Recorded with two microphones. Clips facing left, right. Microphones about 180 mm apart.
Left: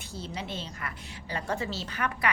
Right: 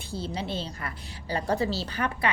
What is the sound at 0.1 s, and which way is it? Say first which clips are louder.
A woman's voice: right 5 dB; 30° right (ahead or behind).